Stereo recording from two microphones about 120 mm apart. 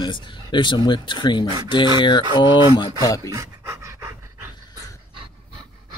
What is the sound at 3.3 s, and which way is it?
Pant, 25° right (ahead or behind).